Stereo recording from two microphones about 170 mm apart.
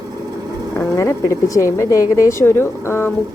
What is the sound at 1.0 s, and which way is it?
Speech, 15° left (ahead or behind).